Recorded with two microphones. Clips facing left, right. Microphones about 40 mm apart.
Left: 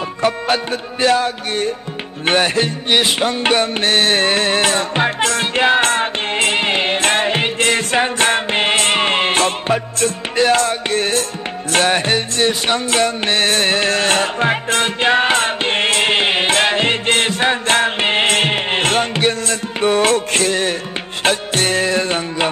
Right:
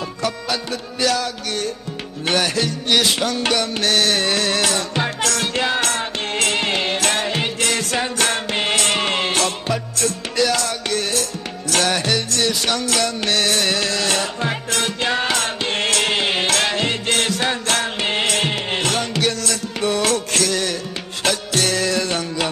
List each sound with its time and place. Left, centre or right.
0.2 s music: left